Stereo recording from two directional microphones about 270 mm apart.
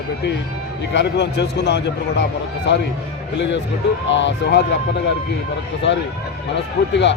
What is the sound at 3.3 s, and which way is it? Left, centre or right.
Speech, left.